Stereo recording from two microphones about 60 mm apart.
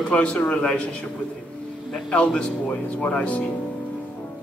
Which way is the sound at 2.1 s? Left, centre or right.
Centre.